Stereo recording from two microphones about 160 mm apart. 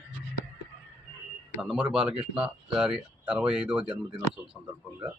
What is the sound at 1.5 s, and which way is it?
Speech, 5° right (ahead or behind).